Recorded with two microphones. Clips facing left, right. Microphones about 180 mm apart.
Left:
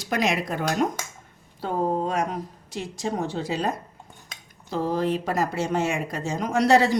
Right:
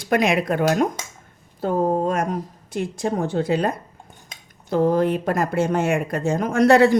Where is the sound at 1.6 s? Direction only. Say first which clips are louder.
Right 5 dB; 45° right (ahead or behind).